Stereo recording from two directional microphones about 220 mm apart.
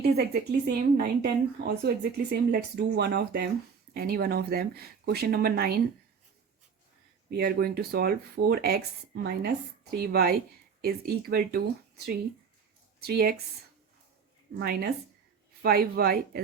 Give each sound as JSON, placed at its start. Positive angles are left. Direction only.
{"t": 0.0, "sound": "speech", "side_deg": -45}
{"t": 7.3, "sound": "speech", "side_deg": -45}
{"t": 14.6, "sound": "speech", "side_deg": -45}